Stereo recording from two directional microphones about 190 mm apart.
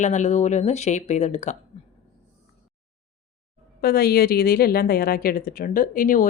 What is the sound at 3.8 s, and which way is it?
Speech, 55° left (ahead or behind).